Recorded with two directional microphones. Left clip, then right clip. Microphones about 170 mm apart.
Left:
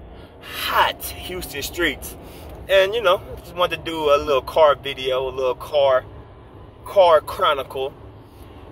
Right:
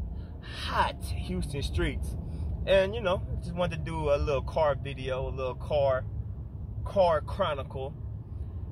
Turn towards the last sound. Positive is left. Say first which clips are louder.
# left 11 dB
turn(degrees=-10)  # may be behind; listen again after turning